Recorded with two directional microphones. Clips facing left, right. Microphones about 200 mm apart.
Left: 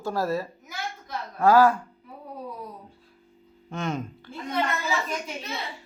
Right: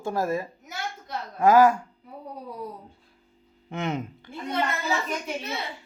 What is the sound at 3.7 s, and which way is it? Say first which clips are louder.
Speech: right 1 dB; 20° right (ahead or behind).